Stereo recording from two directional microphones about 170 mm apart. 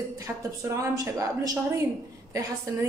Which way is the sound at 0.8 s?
20° right (ahead or behind).